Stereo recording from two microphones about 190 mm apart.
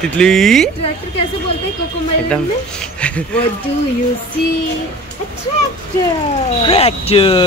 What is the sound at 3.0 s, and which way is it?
Speech, 5° left (ahead or behind).